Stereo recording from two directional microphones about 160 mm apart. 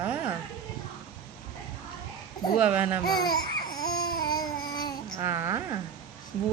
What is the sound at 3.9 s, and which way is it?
Babbling, 70° left (ahead or behind).